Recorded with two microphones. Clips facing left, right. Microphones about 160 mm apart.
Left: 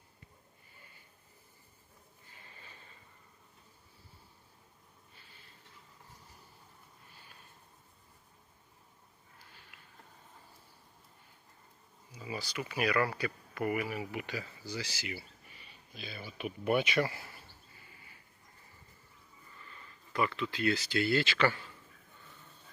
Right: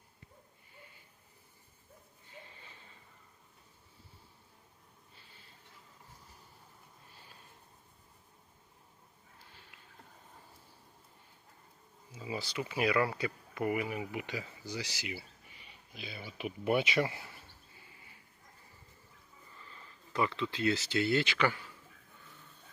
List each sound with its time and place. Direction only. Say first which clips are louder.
12.1 s speech: right 2 dB; 20° right (ahead or behind)
20.1 s speech: even; 20° right (ahead or behind)